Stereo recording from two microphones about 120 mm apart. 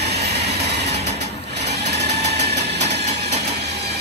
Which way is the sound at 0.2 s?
65° right (ahead or behind).